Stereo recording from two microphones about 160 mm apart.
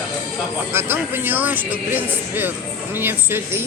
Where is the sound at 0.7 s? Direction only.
15° right (ahead or behind).